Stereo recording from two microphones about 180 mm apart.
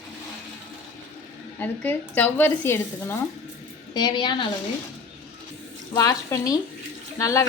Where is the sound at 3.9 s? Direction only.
25° left (ahead or behind).